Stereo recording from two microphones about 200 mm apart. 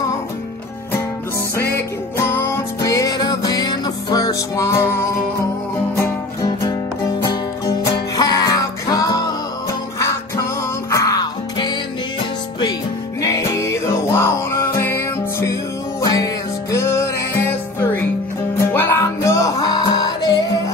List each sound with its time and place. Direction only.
1.6 s music: 10° left (ahead or behind)
7.2 s music: 20° left (ahead or behind)
10.9 s music: 15° left (ahead or behind)
13.2 s music: 15° left (ahead or behind)
18.6 s music: 15° left (ahead or behind)